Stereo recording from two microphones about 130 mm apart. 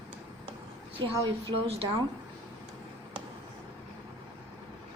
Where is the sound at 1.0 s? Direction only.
45° right (ahead or behind).